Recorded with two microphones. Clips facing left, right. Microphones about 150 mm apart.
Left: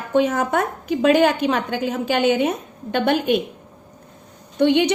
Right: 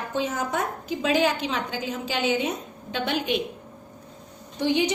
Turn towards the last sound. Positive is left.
turn(degrees=70)  # may be behind; listen again after turning